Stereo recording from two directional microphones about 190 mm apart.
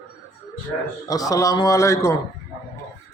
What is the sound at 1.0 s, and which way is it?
Speech, 20° left (ahead or behind).